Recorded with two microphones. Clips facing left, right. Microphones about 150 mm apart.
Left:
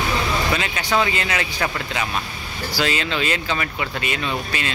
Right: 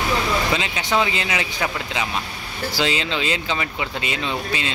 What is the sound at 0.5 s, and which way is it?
A man's voice, 20° right (ahead or behind).